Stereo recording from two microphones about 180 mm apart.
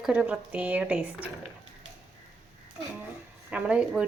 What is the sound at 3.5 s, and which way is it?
Speech, 5° right (ahead or behind).